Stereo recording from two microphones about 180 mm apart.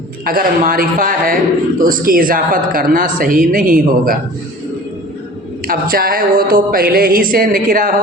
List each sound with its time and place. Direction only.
0.3 s a woman's voice: 55° right (ahead or behind)
5.6 s a woman's voice: 55° right (ahead or behind)